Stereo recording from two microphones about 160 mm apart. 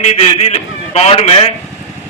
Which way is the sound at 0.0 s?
40° left (ahead or behind).